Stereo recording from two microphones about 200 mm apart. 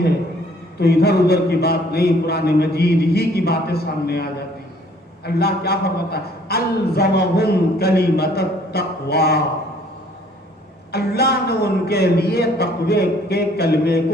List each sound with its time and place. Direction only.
0.8 s a man's voice: 55° left (ahead or behind)
10.9 s a man's voice: 55° left (ahead or behind)